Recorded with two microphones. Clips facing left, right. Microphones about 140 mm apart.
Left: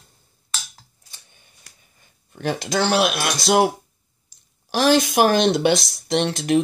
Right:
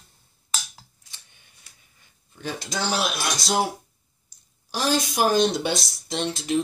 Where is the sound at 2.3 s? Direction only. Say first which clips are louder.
Left 8 dB; 70° left (ahead or behind).